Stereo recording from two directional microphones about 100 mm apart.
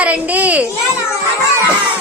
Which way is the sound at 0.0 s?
15° right (ahead or behind).